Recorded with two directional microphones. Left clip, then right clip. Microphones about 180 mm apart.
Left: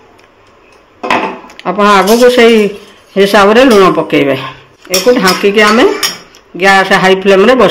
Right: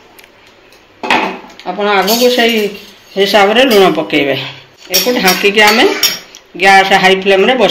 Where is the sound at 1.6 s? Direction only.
45° left (ahead or behind).